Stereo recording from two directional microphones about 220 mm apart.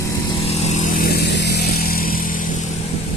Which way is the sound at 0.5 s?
35° left (ahead or behind).